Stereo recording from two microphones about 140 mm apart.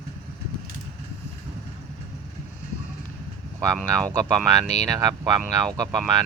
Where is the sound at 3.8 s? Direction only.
5° left (ahead or behind).